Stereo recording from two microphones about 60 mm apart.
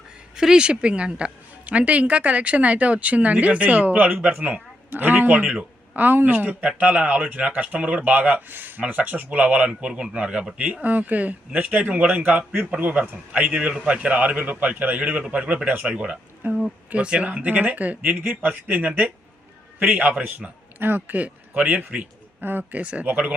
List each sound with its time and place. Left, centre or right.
0.3 s speech: centre
6.1 s a man's voice: right